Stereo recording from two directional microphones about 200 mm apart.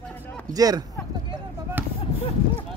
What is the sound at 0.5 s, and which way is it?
Speech, 20° right (ahead or behind).